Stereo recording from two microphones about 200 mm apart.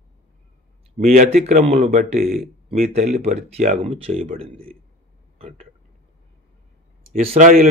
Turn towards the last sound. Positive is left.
turn(degrees=-40)  # may be behind; listen again after turning